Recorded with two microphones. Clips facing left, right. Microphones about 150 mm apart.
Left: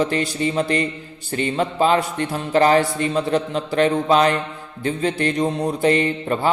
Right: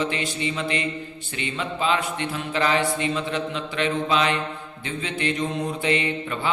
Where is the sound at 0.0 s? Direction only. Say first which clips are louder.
Left 6 dB; 40° left (ahead or behind).